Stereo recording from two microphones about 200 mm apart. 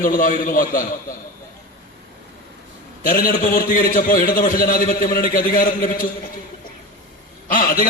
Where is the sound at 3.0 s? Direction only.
45° left (ahead or behind).